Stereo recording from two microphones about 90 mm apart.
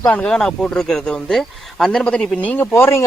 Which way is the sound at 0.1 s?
10° left (ahead or behind).